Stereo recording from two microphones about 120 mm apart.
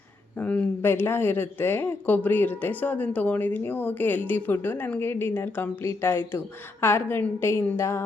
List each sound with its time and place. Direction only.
0.3 s a woman's voice: 10° left (ahead or behind)